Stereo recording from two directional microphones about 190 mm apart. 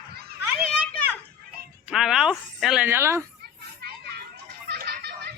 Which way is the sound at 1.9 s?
Centre (ahead or behind).